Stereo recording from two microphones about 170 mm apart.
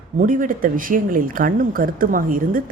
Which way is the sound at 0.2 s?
55° right (ahead or behind).